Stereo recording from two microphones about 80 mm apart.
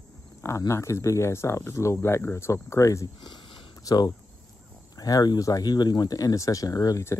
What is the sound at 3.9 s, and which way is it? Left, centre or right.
Speech, left.